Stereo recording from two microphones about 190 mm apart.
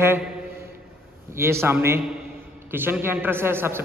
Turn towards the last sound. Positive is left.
turn(degrees=-10)  # may be behind; listen again after turning